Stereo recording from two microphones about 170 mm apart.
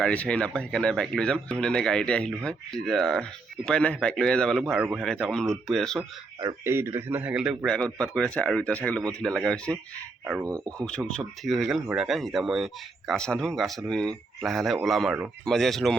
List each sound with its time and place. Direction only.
0.0 s speech: 5° left (ahead or behind)
6.4 s a man's voice: 15° right (ahead or behind); by 9.7 s 5° left (ahead or behind)
10.4 s speech: 20° right (ahead or behind)
10.8 s speech: 5° left (ahead or behind)